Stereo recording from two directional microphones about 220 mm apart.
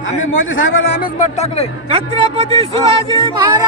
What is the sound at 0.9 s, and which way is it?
Speech, 35° left (ahead or behind).